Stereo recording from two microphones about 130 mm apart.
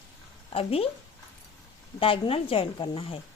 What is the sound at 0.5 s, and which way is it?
Speech, 45° left (ahead or behind).